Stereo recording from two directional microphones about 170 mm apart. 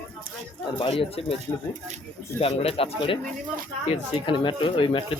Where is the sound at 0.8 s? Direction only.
30° left (ahead or behind).